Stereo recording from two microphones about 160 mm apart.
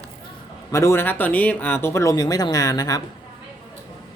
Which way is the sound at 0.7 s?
20° left (ahead or behind).